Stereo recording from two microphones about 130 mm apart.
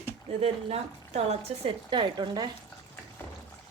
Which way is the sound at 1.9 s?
35° right (ahead or behind).